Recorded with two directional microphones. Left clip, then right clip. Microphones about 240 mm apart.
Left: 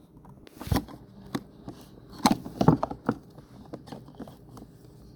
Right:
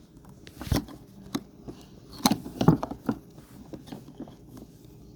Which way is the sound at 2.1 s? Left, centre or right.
Right.